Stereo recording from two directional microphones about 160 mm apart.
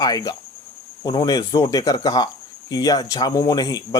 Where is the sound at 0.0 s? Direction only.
25° left (ahead or behind).